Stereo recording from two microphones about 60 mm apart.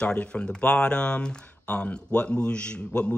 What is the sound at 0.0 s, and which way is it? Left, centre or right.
Speech, centre.